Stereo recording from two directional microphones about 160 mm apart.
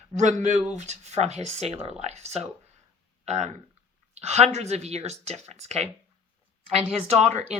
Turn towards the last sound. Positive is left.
turn(degrees=-45)  # may be behind; listen again after turning